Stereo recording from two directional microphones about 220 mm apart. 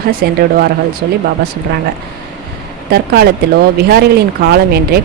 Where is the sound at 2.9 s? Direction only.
45° right (ahead or behind).